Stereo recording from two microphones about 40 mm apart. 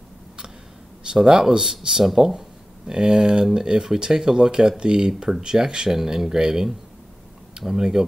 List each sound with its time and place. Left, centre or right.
1.1 s speech: centre
5.9 s speech: centre